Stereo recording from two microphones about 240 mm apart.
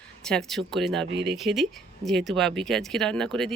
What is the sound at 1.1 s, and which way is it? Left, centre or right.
Speech, right.